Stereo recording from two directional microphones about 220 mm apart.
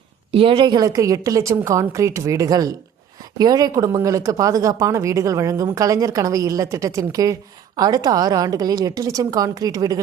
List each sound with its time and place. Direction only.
0.3 s speech: 25° right (ahead or behind)